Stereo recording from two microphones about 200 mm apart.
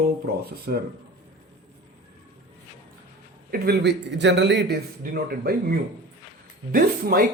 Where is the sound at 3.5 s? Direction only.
55° right (ahead or behind).